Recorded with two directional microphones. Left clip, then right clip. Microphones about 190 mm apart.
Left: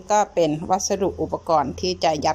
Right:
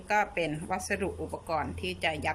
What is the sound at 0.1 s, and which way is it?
A woman's voice, 25° left (ahead or behind).